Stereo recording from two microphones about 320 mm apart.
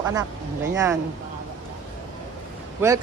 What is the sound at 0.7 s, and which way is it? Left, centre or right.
Speech, centre.